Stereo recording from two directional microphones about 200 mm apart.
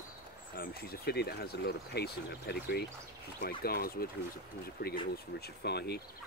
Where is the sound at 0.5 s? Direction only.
50° left (ahead or behind).